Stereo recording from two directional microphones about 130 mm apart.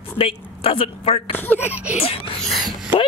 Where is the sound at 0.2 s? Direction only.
50° left (ahead or behind).